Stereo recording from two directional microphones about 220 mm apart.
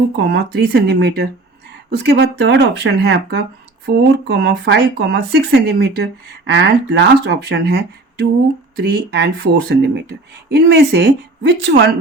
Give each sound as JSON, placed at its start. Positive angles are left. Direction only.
{"t": 0.2, "sound": "speech", "side_deg": -50}